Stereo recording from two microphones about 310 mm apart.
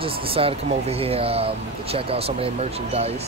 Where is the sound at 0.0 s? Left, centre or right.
Centre.